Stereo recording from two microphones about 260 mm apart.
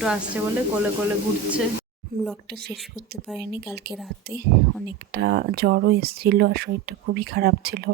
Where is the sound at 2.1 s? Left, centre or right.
Right.